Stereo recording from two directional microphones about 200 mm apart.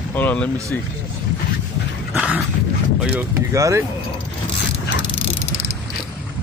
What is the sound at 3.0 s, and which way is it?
Speech, 5° right (ahead or behind).